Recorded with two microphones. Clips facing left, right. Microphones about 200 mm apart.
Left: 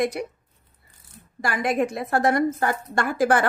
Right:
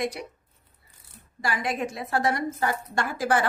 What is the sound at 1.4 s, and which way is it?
A woman's voice, 50° left (ahead or behind).